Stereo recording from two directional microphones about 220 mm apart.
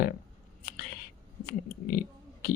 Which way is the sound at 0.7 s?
45° left (ahead or behind).